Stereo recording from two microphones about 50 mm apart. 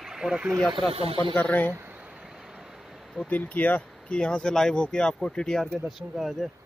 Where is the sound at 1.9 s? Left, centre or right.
Right.